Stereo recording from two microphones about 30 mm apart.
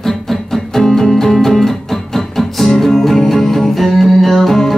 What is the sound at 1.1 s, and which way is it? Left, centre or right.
Music, centre.